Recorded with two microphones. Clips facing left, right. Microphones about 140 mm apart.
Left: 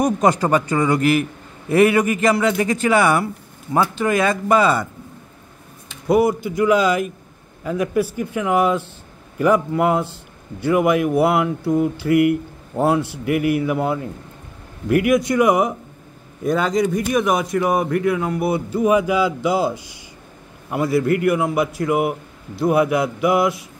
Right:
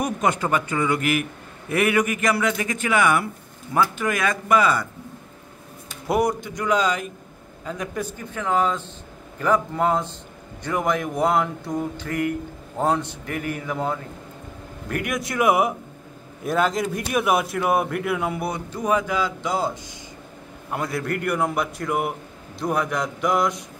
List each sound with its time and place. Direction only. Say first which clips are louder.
0.0 s a man's voice: left 6 dB; 35° left (ahead or behind)
6.0 s speech: left 5 dB; 5° left (ahead or behind)
18.5 s speech: left 9 dB; 10° left (ahead or behind)